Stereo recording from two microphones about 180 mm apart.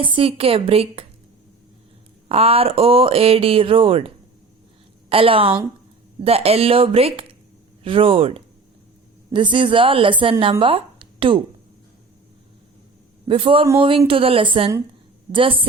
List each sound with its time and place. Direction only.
0.0 s speech: 30° right (ahead or behind)
2.3 s speech: 35° right (ahead or behind)
10.6 s a sound: 30° right (ahead or behind)
13.2 s speech: 30° right (ahead or behind)